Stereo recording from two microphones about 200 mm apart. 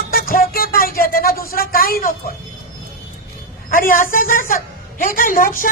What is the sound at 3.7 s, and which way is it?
Speech, 45° left (ahead or behind).